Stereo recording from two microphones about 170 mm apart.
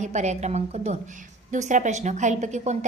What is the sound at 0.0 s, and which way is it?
A woman's voice, 45° right (ahead or behind).